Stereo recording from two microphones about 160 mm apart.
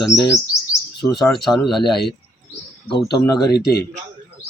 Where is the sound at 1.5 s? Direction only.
Centre (ahead or behind).